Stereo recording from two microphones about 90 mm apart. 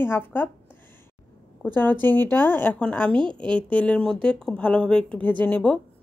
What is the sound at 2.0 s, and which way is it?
Speech, 20° left (ahead or behind).